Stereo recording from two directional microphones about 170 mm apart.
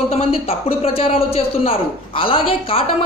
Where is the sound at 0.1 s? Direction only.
35° left (ahead or behind).